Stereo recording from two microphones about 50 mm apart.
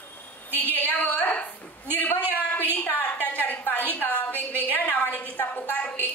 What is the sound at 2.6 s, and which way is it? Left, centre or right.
A woman's voice, left.